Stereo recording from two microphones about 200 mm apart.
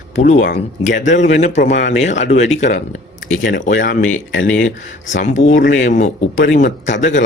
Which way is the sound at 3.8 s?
45° left (ahead or behind).